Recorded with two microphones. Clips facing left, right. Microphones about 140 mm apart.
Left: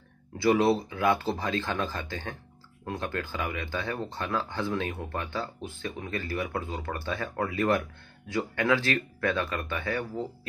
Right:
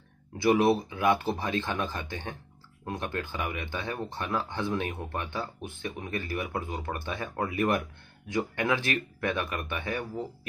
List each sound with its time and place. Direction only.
0.4 s speech: 20° right (ahead or behind)